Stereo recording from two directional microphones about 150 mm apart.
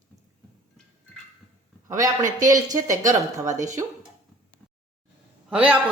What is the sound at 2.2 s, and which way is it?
Speech, 60° right (ahead or behind).